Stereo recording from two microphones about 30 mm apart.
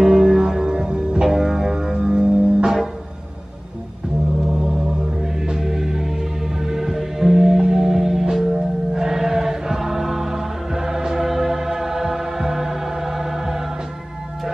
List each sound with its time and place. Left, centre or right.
0.0 s music: centre
4.5 s music: centre